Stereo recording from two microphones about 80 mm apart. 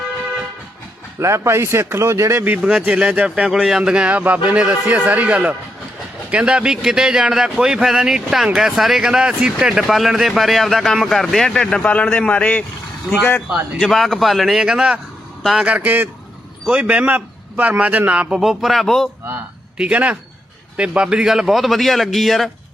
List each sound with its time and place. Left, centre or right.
1.2 s a man's voice: right
2.6 s a man's voice: centre
13.7 s speech: centre
15.6 s a man's voice: centre
19.3 s speech: centre